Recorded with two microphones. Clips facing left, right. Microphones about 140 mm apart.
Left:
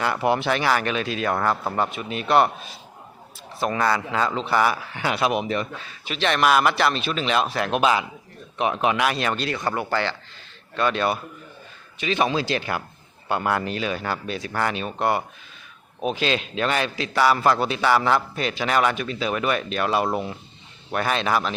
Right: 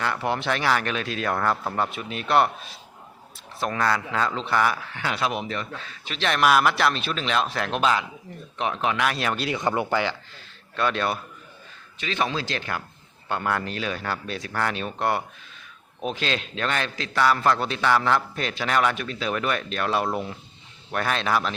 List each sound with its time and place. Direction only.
0.0 s a man's voice: 10° left (ahead or behind); by 9.6 s 5° right (ahead or behind)
9.6 s speech: 20° right (ahead or behind)
10.8 s a man's voice: centre (ahead or behind)
11.9 s a man's voice: 15° left (ahead or behind)